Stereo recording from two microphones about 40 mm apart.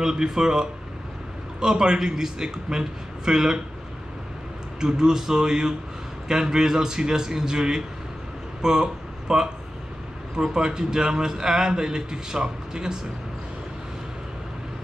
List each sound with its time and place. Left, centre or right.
0.0 s a man's voice: centre
4.7 s a man's voice: centre